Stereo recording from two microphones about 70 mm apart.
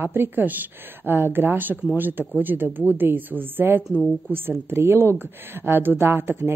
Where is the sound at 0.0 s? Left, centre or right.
Right.